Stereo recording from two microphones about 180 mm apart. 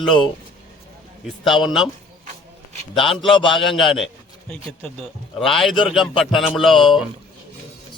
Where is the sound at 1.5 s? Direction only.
Centre (ahead or behind).